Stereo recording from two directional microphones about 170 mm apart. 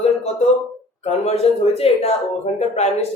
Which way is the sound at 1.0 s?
35° left (ahead or behind).